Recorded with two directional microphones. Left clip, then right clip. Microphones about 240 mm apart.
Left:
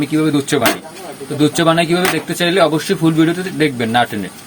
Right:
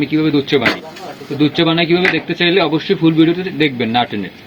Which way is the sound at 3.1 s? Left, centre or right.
Left.